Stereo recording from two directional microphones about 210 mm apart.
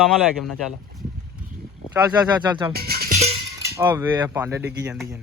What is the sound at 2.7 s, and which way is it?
Music, 45° right (ahead or behind).